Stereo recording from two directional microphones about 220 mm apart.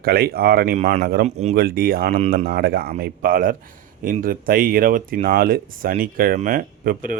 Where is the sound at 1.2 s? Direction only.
30° right (ahead or behind).